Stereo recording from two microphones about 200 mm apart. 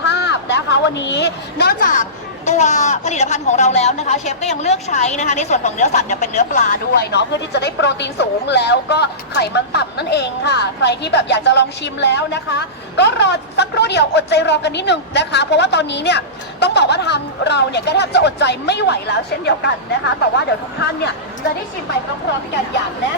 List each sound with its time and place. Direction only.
0.1 s a woman's voice: 60° left (ahead or behind); by 6.7 s 40° left (ahead or behind)
7.1 s speech: 60° left (ahead or behind)